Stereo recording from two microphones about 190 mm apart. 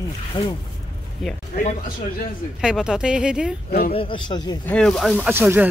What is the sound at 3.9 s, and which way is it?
Speech, 25° left (ahead or behind).